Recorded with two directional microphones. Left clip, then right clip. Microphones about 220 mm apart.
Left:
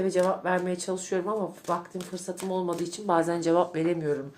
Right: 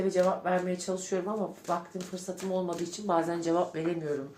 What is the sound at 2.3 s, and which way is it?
Speech, 45° left (ahead or behind).